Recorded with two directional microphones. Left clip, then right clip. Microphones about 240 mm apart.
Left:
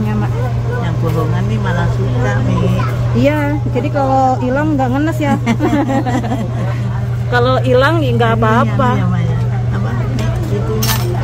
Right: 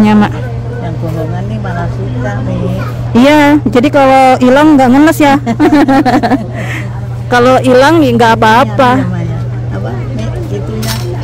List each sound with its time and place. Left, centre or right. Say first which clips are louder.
0.0 s vehicle: right 12 dB; right
3.2 s speech: right 10 dB; right
5.8 s a sound: right 9 dB; right
7.2 s speech: right 7 dB; right